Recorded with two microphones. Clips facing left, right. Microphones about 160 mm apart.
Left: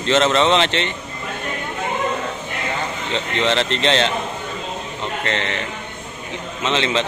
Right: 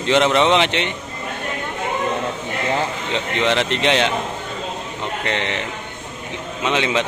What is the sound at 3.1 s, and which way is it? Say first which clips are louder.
Speech: even; 10° right (ahead or behind).